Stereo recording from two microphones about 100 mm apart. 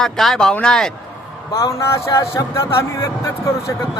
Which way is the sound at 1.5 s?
30° left (ahead or behind).